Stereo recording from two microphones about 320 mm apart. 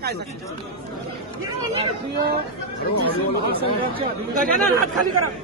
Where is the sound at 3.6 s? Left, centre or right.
Right.